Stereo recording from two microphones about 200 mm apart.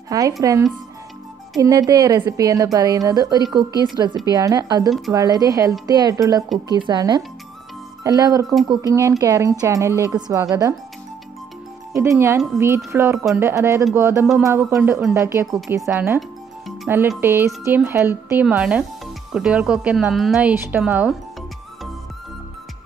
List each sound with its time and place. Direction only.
0.4 s a woman's voice: 15° right (ahead or behind)
4.8 s a woman's voice: centre (ahead or behind)
5.1 s a woman's voice: 20° right (ahead or behind)
11.9 s a woman's voice: 15° right (ahead or behind)